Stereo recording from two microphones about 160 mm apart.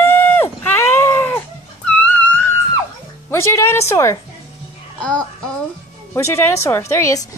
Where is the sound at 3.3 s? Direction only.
15° left (ahead or behind).